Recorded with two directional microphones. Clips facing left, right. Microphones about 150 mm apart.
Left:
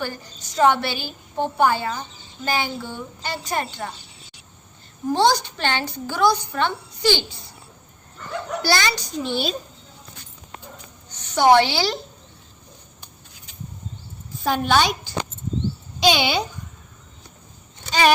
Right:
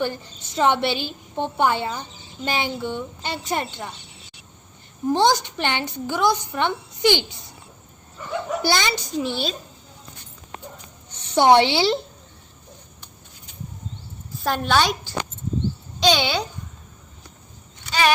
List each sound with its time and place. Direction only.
0.0 s a woman's voice: 25° right (ahead or behind)
5.1 s a woman's voice: 20° right (ahead or behind)
8.2 s a sound: centre (ahead or behind)
8.6 s a woman's voice: 20° right (ahead or behind)
9.2 s a woman's voice: 5° left (ahead or behind)
11.1 s a sound: 30° right (ahead or behind)
11.5 s a woman's voice: 25° right (ahead or behind)
14.4 s a woman's voice: centre (ahead or behind)